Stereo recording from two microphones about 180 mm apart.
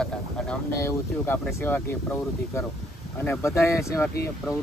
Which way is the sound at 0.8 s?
15° left (ahead or behind).